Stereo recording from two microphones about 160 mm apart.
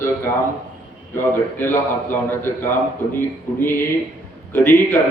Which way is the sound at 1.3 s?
15° left (ahead or behind).